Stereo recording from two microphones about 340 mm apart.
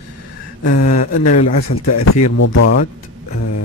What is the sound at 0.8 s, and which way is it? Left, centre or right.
Speech, left.